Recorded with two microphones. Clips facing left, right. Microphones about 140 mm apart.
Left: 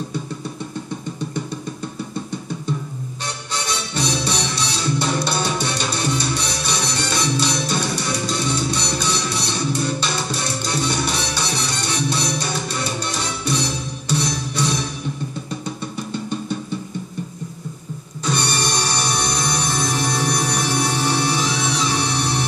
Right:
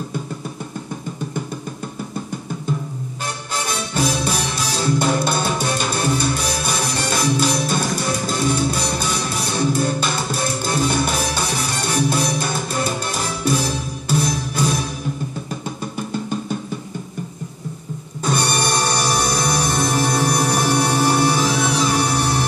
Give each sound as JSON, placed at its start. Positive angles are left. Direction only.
{"t": 3.5, "sound": "music", "side_deg": -45}
{"t": 14.0, "sound": "music", "side_deg": -50}
{"t": 18.2, "sound": "music", "side_deg": -50}